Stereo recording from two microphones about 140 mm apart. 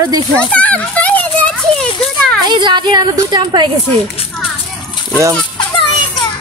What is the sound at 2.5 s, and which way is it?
A woman's voice, 30° right (ahead or behind).